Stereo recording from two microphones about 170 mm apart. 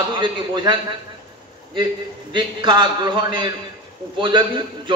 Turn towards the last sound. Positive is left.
turn(degrees=-30)  # may be behind; listen again after turning